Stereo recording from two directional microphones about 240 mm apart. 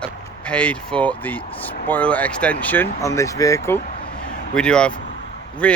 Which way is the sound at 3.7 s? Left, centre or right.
Left.